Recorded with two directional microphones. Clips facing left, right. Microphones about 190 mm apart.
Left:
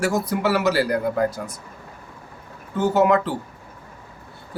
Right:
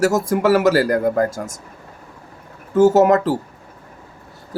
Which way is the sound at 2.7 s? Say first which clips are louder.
Right 6 dB; 45° right (ahead or behind).